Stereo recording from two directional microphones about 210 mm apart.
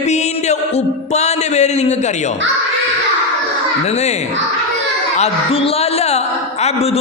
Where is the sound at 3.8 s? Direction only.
30° left (ahead or behind).